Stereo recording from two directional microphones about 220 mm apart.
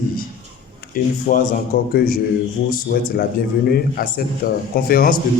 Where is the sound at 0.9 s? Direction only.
40° left (ahead or behind).